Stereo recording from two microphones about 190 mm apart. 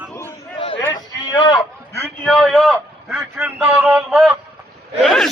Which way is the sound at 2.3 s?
5° left (ahead or behind).